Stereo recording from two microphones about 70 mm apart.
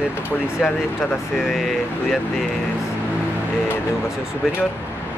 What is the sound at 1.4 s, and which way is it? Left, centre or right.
Speech, centre.